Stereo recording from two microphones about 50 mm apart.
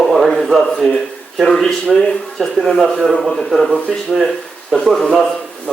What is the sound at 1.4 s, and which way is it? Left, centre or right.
A man's voice, centre.